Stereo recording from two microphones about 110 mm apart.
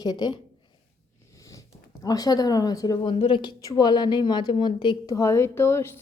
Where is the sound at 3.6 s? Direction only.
40° left (ahead or behind).